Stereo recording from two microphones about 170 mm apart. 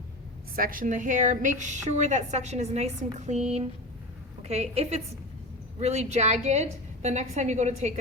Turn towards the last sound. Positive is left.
turn(degrees=-45)  # may be behind; listen again after turning